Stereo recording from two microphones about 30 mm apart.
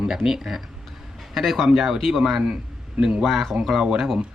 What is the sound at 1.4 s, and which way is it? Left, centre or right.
Speech, centre.